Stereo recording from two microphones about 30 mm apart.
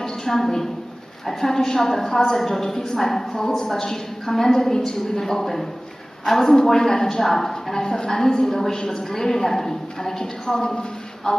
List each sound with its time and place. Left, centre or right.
0.0 s a woman's voice: centre